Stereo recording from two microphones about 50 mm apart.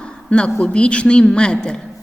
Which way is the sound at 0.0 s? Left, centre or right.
Left.